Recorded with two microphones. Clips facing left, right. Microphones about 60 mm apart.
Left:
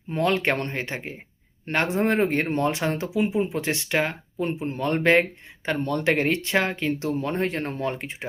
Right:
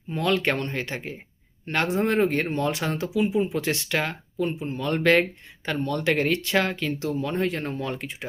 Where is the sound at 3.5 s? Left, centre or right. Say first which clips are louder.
Left 1 dB; left.